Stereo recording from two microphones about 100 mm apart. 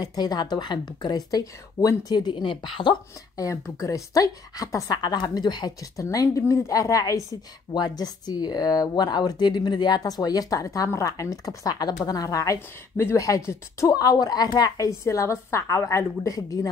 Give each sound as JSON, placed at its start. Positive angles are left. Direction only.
{"t": 0.0, "sound": "a woman's voice", "side_deg": 40}
{"t": 3.3, "sound": "a woman's voice", "side_deg": 30}